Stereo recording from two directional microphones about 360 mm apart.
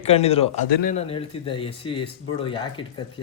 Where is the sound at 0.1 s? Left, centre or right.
Centre.